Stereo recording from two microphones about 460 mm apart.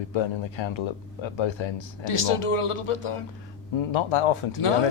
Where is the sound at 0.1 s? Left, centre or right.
Left.